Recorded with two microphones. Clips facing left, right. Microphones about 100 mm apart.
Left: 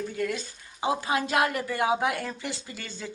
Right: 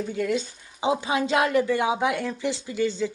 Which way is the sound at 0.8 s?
20° right (ahead or behind).